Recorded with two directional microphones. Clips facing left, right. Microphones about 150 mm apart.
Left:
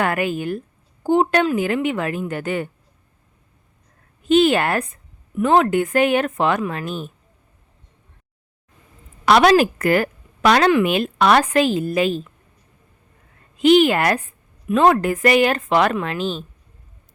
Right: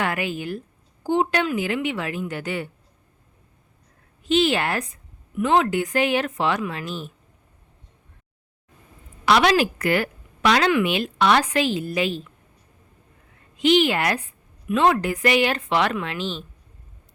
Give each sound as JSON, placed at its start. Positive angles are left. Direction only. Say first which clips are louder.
{"t": 0.0, "sound": "speech", "louder": "left 5 dB", "side_deg": 50}
{"t": 4.3, "sound": "speech", "louder": "left 5 dB", "side_deg": 50}
{"t": 9.2, "sound": "speech", "louder": "left 5 dB", "side_deg": 45}
{"t": 13.6, "sound": "speech", "louder": "left 5 dB", "side_deg": 45}